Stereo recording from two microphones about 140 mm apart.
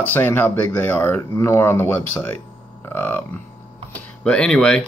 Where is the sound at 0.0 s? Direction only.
15° left (ahead or behind).